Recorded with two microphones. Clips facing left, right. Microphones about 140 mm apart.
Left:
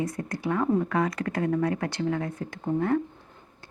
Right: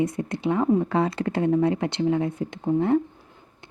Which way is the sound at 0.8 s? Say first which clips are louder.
Right 3 dB; 25° right (ahead or behind).